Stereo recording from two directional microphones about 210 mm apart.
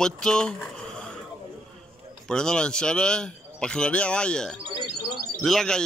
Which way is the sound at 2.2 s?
5° left (ahead or behind).